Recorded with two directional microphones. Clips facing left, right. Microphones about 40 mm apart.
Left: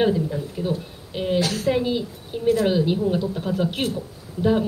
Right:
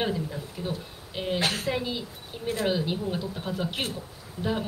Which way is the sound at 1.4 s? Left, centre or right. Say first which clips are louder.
Left 3 dB; right.